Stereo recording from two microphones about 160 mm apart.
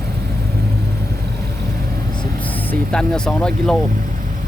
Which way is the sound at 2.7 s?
5° left (ahead or behind).